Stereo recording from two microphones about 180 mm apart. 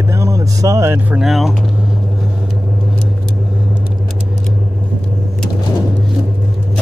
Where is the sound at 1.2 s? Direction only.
Centre (ahead or behind).